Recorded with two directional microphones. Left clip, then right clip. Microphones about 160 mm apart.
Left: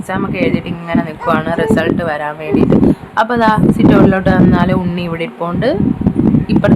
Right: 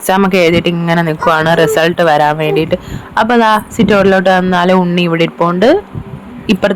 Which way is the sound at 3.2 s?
45° right (ahead or behind).